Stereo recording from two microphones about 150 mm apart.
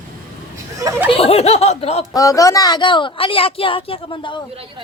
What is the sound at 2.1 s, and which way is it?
A woman's voice, 20° left (ahead or behind).